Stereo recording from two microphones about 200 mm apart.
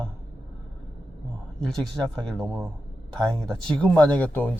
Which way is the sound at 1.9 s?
Centre (ahead or behind).